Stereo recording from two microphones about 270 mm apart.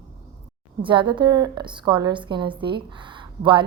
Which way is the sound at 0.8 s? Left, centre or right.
Centre.